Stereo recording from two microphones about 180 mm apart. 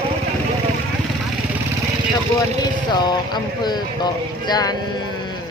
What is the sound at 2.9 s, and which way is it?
Speech, 25° left (ahead or behind).